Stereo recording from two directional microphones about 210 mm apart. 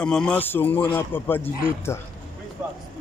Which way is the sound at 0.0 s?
5° left (ahead or behind).